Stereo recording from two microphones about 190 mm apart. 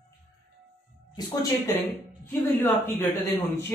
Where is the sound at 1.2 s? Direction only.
20° left (ahead or behind).